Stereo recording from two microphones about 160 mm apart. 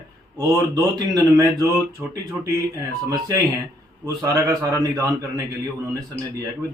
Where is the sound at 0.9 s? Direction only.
20° right (ahead or behind).